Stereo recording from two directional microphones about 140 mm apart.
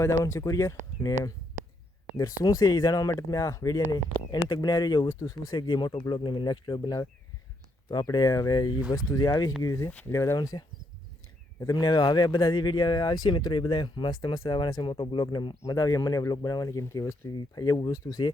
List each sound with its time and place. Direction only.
0.0 s speech: 15° left (ahead or behind)
2.1 s speech: 25° left (ahead or behind)
14.2 s speech: 25° left (ahead or behind)